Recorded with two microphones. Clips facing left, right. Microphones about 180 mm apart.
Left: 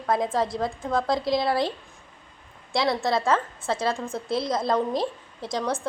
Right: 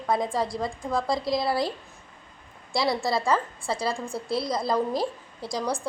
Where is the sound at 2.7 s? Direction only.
Centre (ahead or behind).